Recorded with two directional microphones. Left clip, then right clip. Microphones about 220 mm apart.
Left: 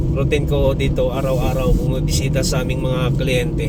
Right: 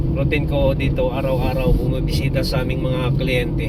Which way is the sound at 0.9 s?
20° left (ahead or behind).